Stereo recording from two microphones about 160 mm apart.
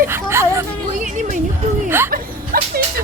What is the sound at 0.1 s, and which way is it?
Whimper, 15° right (ahead or behind).